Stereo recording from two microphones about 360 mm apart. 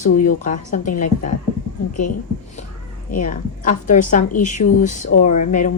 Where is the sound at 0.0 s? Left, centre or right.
Left.